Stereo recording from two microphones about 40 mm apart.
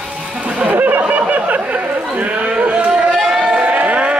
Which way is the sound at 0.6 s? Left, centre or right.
Right.